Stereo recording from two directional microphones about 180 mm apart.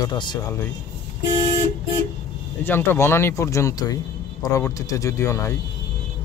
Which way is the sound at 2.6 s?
10° left (ahead or behind).